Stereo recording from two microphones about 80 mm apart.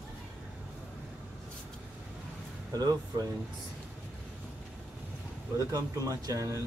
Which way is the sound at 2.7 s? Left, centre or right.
Right.